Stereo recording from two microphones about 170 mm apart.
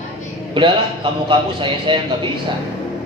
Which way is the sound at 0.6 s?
30° right (ahead or behind).